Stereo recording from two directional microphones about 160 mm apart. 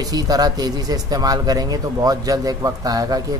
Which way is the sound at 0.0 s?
25° right (ahead or behind).